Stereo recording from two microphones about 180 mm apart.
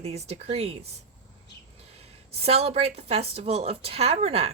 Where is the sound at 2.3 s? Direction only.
35° right (ahead or behind).